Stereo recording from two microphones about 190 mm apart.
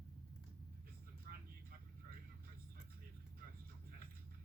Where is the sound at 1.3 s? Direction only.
50° right (ahead or behind).